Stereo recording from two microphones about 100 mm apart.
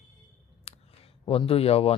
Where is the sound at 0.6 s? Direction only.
75° left (ahead or behind).